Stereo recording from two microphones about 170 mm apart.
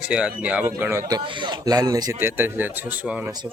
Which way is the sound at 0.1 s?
5° right (ahead or behind).